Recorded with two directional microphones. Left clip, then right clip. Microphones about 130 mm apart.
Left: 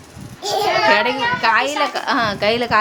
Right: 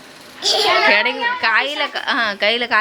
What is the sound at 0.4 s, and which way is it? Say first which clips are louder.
Children playing: right 3 dB; 55° left (ahead or behind).